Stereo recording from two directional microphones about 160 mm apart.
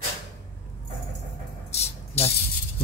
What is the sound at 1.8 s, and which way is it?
Rattle, 40° left (ahead or behind).